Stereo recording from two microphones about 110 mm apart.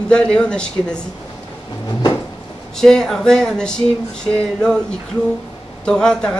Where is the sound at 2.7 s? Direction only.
5° left (ahead or behind).